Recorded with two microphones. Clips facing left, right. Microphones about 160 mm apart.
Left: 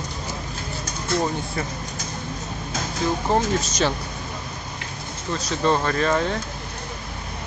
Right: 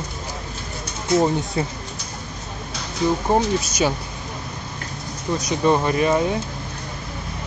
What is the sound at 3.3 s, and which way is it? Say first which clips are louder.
Speech: right 1 dB; 15° right (ahead or behind).